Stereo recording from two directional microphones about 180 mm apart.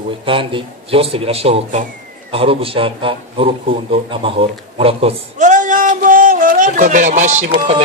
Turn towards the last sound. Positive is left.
turn(degrees=-40)  # may be behind; listen again after turning